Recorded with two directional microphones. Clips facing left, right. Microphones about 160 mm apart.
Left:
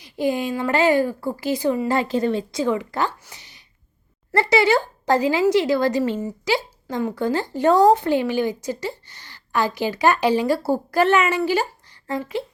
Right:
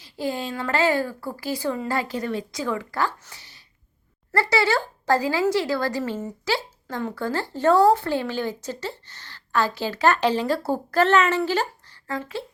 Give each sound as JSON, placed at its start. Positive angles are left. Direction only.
{"t": 0.0, "sound": "speech", "side_deg": 15}